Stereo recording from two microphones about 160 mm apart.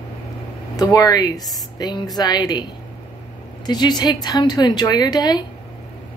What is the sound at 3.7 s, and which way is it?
A woman's voice, 25° left (ahead or behind).